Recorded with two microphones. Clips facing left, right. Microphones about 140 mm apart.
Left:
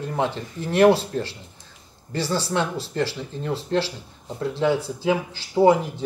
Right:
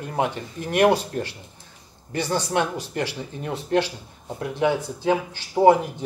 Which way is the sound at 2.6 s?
15° right (ahead or behind).